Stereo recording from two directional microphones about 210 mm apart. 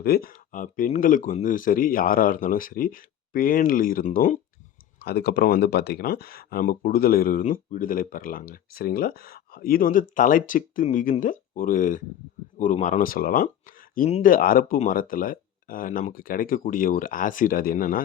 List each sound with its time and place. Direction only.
0.0 s speech: 45° left (ahead or behind)